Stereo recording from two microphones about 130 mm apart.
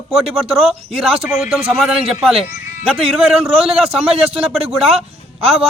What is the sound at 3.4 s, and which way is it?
Speech, 50° right (ahead or behind).